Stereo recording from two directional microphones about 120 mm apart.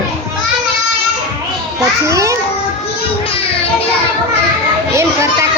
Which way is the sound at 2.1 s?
25° right (ahead or behind).